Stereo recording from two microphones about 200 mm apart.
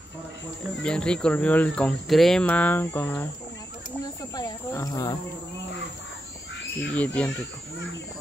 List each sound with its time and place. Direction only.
0.8 s speech: 5° left (ahead or behind)
7.0 s speech: 5° left (ahead or behind)